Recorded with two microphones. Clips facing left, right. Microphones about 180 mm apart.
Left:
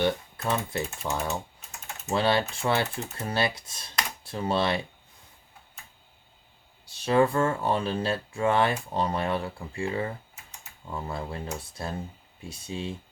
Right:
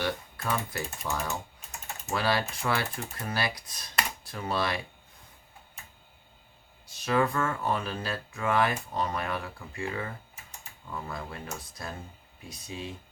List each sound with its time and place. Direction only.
0.0 s speech: 25° left (ahead or behind)
6.8 s speech: 30° left (ahead or behind)